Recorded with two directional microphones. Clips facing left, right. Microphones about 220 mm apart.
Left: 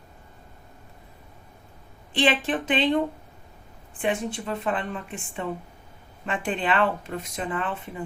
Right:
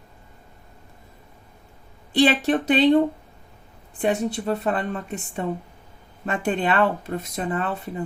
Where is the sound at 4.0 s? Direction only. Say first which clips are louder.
Right 4 dB; 40° right (ahead or behind).